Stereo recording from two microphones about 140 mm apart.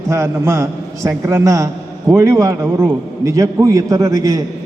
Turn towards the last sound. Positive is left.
turn(degrees=-25)  # may be behind; listen again after turning